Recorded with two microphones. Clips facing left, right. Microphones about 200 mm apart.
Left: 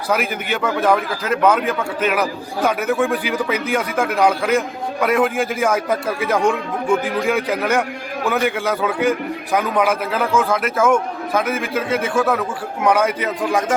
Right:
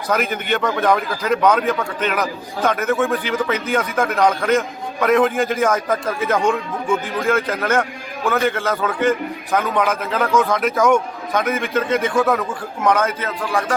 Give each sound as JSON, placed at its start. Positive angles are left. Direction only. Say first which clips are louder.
{"t": 0.1, "sound": "a man's voice", "louder": "right 1 dB", "side_deg": 10}